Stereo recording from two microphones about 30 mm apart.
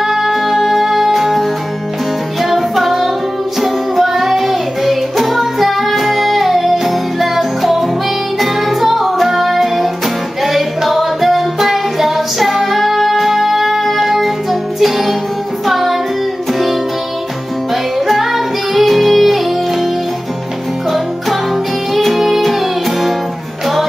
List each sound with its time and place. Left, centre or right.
0.0 s music: centre
17.9 s music: centre
21.9 s music: centre